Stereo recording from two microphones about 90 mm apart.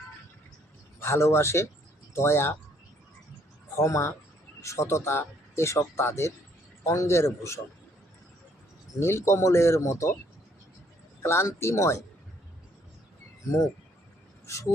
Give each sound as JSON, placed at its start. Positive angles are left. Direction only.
{"t": 0.9, "sound": "a man's voice", "side_deg": 30}
{"t": 3.8, "sound": "speech", "side_deg": 30}
{"t": 9.0, "sound": "speech", "side_deg": 30}
{"t": 11.2, "sound": "speech", "side_deg": 30}
{"t": 14.4, "sound": "speech", "side_deg": 35}